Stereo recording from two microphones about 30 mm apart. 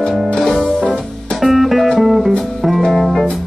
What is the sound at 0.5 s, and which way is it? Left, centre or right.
Music, left.